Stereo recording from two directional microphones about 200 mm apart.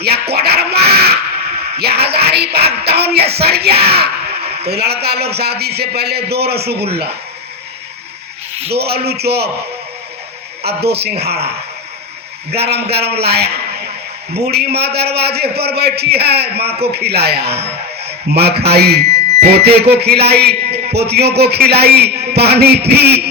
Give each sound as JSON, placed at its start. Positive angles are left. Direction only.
{"t": 0.0, "sound": "music", "side_deg": -55}
{"t": 4.6, "sound": "a man's voice", "side_deg": -55}
{"t": 8.7, "sound": "a man's voice", "side_deg": -55}
{"t": 10.6, "sound": "a man's voice", "side_deg": -55}
{"t": 12.5, "sound": "a man's voice", "side_deg": -55}